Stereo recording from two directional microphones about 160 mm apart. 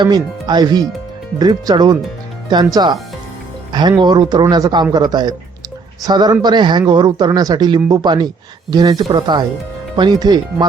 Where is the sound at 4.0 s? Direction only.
25° right (ahead or behind).